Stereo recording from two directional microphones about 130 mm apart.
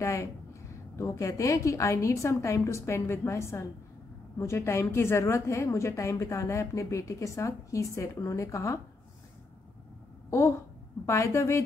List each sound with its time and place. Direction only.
0.0 s a woman's voice: 20° left (ahead or behind)
11.1 s a woman's voice: 20° left (ahead or behind)